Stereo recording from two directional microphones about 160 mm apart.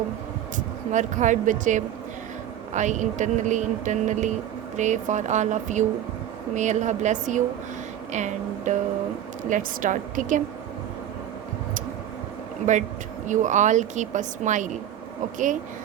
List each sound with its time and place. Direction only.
0.9 s speech: 50° right (ahead or behind)
12.7 s speech: 50° right (ahead or behind)